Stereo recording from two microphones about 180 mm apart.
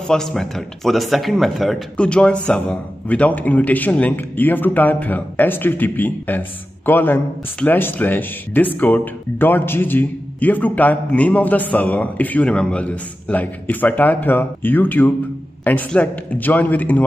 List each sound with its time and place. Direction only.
0.1 s a man's voice: centre (ahead or behind)